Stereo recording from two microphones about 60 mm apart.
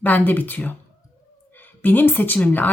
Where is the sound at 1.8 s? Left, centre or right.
Left.